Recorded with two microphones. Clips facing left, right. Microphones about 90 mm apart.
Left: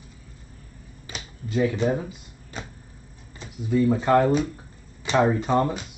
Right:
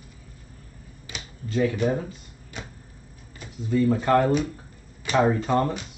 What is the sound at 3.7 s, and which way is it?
Speech, 10° left (ahead or behind).